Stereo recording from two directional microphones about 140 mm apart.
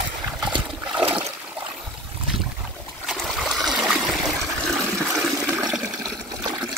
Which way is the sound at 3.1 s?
Centre (ahead or behind).